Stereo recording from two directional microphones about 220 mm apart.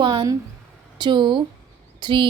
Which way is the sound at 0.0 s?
20° right (ahead or behind).